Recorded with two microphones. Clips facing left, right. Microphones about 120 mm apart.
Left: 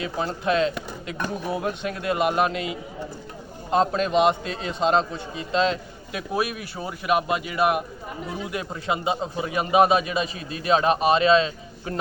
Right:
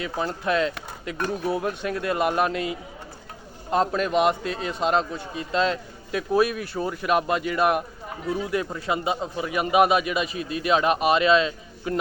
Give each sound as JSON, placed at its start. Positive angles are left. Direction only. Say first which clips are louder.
{"t": 0.0, "sound": "a man's voice", "louder": "left 1 dB", "side_deg": 25}